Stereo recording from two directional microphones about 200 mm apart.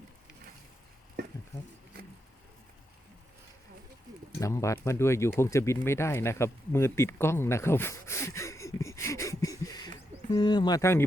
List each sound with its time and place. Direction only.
1.2 s stir: 55° right (ahead or behind)
1.5 s speech: 35° left (ahead or behind)
4.4 s speech: 15° left (ahead or behind)